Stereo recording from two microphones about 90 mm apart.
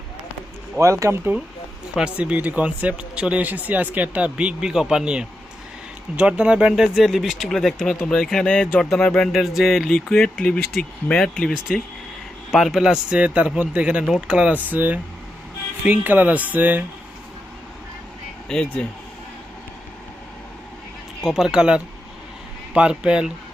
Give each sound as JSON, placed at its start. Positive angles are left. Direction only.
{"t": 0.8, "sound": "speech", "side_deg": -35}
{"t": 2.0, "sound": "speech", "side_deg": -15}
{"t": 12.5, "sound": "speech", "side_deg": -5}
{"t": 18.4, "sound": "speech", "side_deg": 10}
{"t": 21.2, "sound": "speech", "side_deg": 0}